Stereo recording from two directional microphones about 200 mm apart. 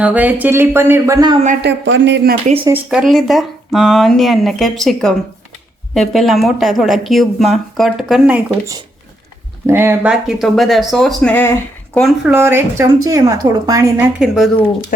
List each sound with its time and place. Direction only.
0.0 s speech: 10° right (ahead or behind)
1.6 s speech: 60° right (ahead or behind)
2.6 s speech: 5° right (ahead or behind)
9.6 s speech: 10° right (ahead or behind); by 12.0 s 10° left (ahead or behind)
12.0 s speech: 5° right (ahead or behind)
14.2 s speech: centre (ahead or behind)